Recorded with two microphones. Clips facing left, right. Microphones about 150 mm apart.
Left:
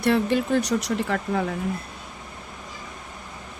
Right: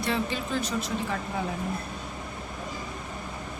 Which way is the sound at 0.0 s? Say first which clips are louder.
Left 8 dB; 60° left (ahead or behind).